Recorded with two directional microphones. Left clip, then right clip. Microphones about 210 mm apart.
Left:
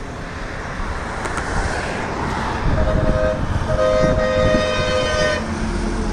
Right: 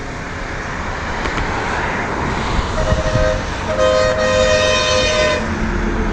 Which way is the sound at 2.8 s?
40° left (ahead or behind).